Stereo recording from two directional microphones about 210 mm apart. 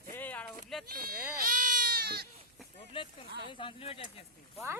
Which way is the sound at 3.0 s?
25° left (ahead or behind).